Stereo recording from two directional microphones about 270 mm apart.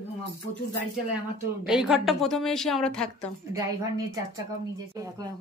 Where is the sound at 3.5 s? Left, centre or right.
Centre.